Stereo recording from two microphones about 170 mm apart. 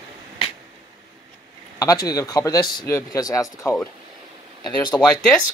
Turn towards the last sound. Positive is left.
turn(degrees=5)  # may be behind; listen again after turning